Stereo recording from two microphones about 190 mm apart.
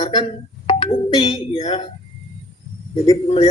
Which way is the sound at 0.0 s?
20° left (ahead or behind).